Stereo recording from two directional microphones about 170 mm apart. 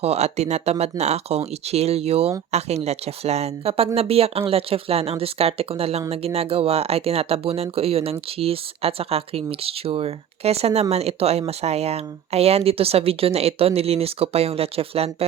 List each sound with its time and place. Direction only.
0.0 s speech: 40° right (ahead or behind)